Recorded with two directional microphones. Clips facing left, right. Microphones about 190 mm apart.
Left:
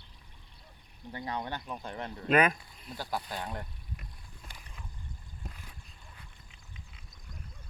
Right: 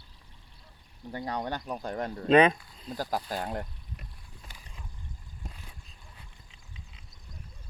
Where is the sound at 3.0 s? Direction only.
40° right (ahead or behind).